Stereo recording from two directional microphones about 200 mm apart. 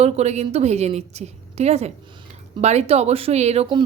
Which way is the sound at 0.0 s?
35° right (ahead or behind).